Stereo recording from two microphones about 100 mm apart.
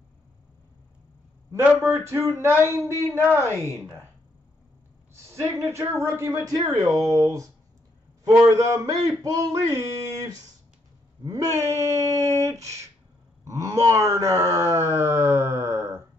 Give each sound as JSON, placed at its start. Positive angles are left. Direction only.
{"t": 1.6, "sound": "a man's voice", "side_deg": -25}
{"t": 5.3, "sound": "a man's voice", "side_deg": -30}
{"t": 6.5, "sound": "a sound", "side_deg": -40}
{"t": 13.4, "sound": "wail", "side_deg": -35}